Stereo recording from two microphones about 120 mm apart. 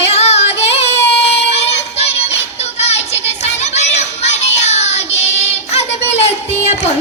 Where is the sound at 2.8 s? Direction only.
65° left (ahead or behind).